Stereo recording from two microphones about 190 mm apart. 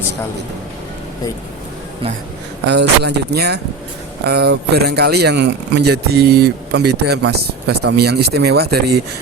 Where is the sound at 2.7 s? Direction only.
60° right (ahead or behind).